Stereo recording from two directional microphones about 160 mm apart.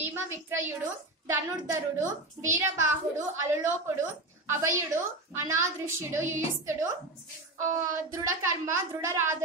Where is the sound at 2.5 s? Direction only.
20° right (ahead or behind).